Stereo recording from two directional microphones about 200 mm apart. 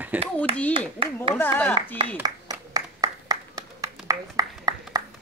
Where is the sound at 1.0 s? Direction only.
25° right (ahead or behind).